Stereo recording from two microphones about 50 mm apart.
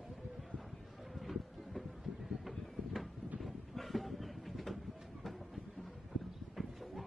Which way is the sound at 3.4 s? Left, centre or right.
Centre.